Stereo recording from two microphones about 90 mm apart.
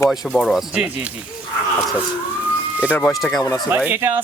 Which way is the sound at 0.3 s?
Centre (ahead or behind).